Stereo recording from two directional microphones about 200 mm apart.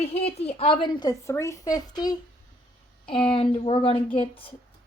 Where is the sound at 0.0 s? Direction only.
30° left (ahead or behind).